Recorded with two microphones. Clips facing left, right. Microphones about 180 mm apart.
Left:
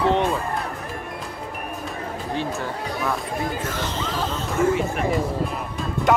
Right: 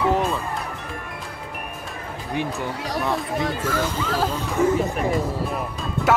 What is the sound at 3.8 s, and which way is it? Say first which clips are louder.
Speech: right 3 dB; 10° right (ahead or behind).